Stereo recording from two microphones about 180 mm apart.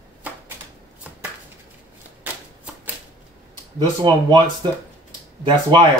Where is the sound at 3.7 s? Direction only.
20° right (ahead or behind).